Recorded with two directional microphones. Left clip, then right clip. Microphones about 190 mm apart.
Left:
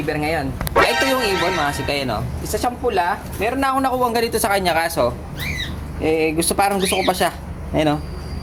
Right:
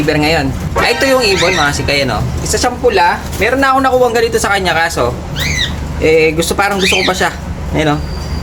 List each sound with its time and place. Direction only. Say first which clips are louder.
0.0 s speech: right 9 dB; centre (ahead or behind)
1.6 s speech: right 8 dB; 20° left (ahead or behind)